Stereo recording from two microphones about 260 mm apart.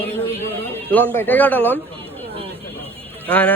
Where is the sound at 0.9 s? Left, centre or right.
Centre.